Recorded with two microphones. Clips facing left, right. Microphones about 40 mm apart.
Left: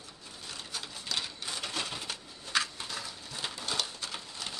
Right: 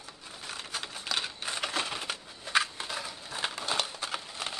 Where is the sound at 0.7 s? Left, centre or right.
Right.